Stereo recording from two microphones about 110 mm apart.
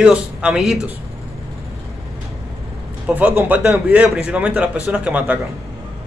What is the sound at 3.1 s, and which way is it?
Speech, 15° right (ahead or behind).